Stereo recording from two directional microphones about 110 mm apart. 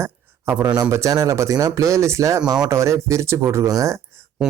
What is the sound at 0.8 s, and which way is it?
Speech, 30° right (ahead or behind).